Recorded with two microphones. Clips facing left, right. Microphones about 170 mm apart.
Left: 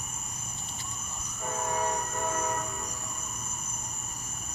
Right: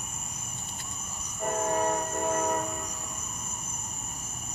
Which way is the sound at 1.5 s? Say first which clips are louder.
Right 4 dB; 45° right (ahead or behind).